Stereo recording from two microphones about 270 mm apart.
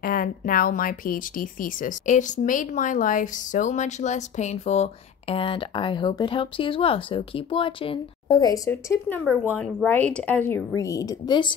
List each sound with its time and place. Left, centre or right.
0.0 s speech: left; by 11.5 s centre